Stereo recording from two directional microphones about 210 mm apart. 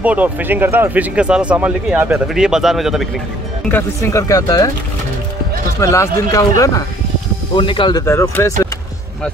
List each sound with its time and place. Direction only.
0.0 s speech: 5° right (ahead or behind)
3.6 s speech: 10° left (ahead or behind)
5.8 s speech: 15° left (ahead or behind)